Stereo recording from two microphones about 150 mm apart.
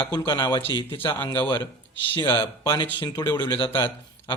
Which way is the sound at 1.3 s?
30° left (ahead or behind).